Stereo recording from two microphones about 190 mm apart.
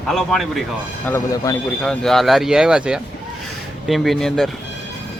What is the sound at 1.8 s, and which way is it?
Speech, centre (ahead or behind).